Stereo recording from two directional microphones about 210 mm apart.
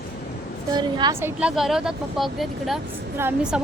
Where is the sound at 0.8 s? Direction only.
20° right (ahead or behind).